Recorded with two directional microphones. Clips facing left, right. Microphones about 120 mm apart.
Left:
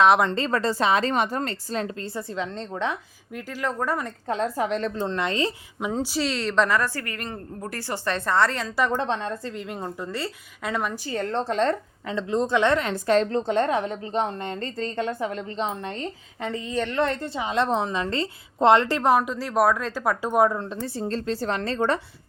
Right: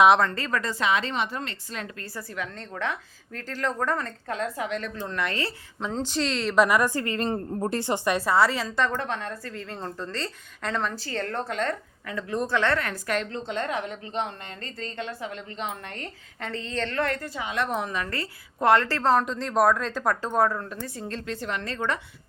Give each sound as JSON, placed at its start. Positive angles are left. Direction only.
{"t": 0.2, "sound": "a woman's voice", "side_deg": 25}
{"t": 4.3, "sound": "a woman's voice", "side_deg": 35}
{"t": 4.9, "sound": "a woman's voice", "side_deg": 25}
{"t": 6.7, "sound": "a woman's voice", "side_deg": -15}
{"t": 8.9, "sound": "a woman's voice", "side_deg": 25}
{"t": 11.3, "sound": "a woman's voice", "side_deg": 30}
{"t": 20.8, "sound": "a woman's voice", "side_deg": 30}